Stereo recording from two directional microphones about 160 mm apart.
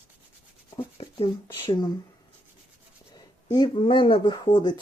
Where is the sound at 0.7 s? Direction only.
35° left (ahead or behind).